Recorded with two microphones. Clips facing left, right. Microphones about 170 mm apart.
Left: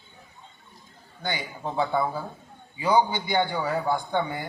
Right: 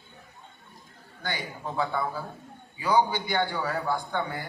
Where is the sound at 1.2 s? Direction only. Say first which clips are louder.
Left 3 dB; 25° left (ahead or behind).